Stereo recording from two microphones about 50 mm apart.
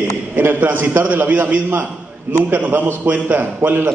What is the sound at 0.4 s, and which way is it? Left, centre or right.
A man's voice, right.